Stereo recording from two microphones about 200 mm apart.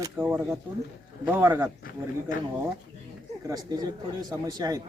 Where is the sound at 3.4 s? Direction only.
20° right (ahead or behind).